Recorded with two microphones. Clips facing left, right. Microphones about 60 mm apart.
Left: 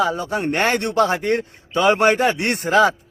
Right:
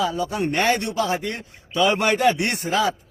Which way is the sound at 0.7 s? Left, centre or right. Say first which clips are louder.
Left 5 dB; left.